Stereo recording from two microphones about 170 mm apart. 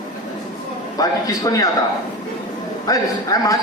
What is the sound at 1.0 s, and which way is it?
Speech, 20° left (ahead or behind).